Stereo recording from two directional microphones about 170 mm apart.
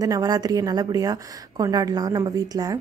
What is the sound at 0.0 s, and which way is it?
A woman's voice, 20° right (ahead or behind).